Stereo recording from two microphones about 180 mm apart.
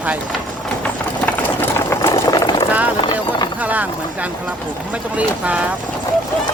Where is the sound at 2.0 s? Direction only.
15° left (ahead or behind).